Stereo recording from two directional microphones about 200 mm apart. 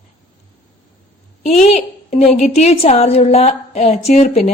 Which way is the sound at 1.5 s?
35° left (ahead or behind).